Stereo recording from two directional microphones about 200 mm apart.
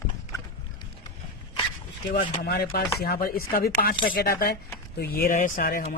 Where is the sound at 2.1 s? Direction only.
45° left (ahead or behind).